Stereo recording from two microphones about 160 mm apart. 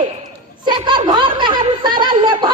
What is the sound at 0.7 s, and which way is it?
Speech, 30° right (ahead or behind).